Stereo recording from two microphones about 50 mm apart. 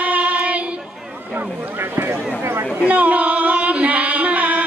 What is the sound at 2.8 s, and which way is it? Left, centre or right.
Singing, right.